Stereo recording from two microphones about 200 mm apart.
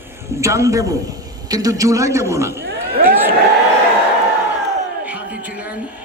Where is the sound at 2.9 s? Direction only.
45° right (ahead or behind).